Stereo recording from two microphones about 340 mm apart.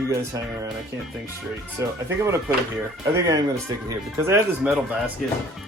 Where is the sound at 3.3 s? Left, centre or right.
Centre.